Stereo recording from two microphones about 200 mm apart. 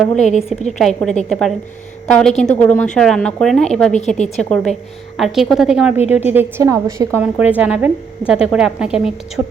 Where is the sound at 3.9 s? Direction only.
35° left (ahead or behind).